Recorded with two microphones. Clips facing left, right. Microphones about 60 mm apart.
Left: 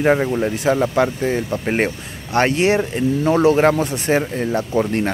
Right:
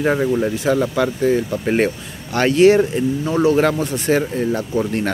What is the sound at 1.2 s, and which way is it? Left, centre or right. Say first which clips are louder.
Speech: right 3 dB; left.